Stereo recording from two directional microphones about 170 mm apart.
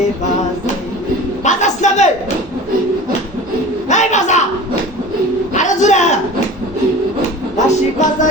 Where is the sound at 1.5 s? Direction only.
45° left (ahead or behind).